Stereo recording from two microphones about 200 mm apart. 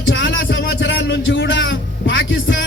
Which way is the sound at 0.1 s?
70° left (ahead or behind).